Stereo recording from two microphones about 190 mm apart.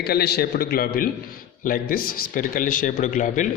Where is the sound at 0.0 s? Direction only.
55° left (ahead or behind).